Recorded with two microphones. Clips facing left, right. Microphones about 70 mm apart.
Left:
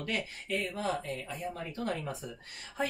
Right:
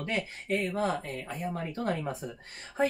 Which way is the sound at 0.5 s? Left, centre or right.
Right.